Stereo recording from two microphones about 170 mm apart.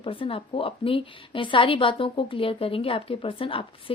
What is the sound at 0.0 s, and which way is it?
A woman's voice, 30° left (ahead or behind).